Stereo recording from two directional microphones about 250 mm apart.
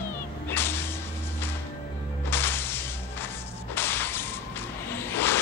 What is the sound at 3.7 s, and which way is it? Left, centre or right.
Whoosh, centre.